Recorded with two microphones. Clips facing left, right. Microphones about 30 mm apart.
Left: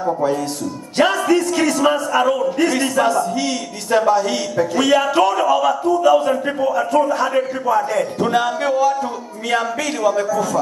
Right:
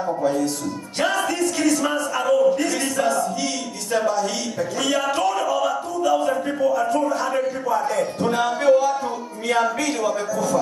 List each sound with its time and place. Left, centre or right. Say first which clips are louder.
1.6 s a man's voice: left 4 dB; left; by 10.6 s centre